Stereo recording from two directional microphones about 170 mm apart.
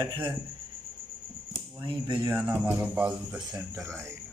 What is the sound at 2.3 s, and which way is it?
Speech, 10° right (ahead or behind).